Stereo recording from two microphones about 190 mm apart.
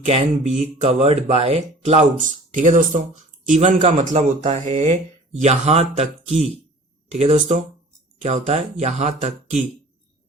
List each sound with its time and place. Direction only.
0.0 s speech: 35° right (ahead or behind)